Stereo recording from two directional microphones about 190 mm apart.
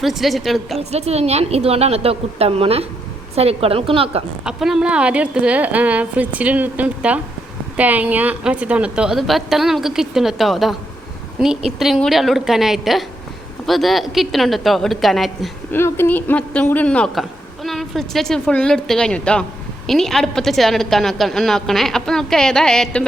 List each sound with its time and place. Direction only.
0.0 s speech: centre (ahead or behind)
0.8 s a woman's voice: 35° right (ahead or behind)
4.4 s a woman's voice: 5° right (ahead or behind)
11.8 s speech: centre (ahead or behind)
15.7 s speech: 10° left (ahead or behind)